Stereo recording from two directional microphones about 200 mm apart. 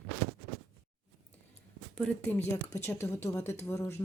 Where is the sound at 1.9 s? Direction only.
5° left (ahead or behind).